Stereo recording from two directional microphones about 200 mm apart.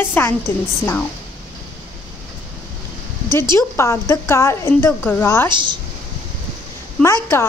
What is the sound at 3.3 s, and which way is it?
A woman's voice, 15° left (ahead or behind).